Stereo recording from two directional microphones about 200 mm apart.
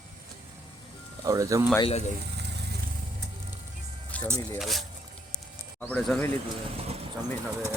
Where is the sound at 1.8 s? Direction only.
35° left (ahead or behind).